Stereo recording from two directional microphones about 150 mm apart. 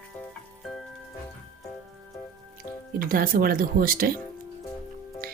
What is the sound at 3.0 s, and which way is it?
Speech, 70° right (ahead or behind).